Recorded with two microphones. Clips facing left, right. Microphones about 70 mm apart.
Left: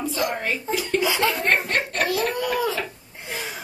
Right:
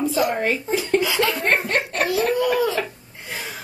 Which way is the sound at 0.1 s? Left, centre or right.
Centre.